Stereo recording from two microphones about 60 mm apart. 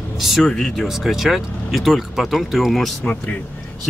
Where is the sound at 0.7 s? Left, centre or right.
Centre.